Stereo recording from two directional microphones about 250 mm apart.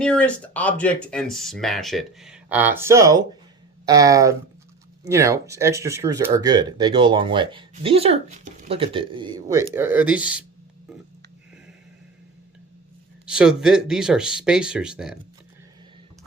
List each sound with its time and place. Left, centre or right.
0.0 s speech: centre
13.2 s speech: centre